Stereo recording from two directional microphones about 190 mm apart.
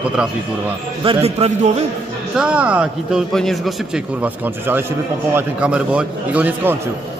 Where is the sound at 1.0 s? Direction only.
30° right (ahead or behind).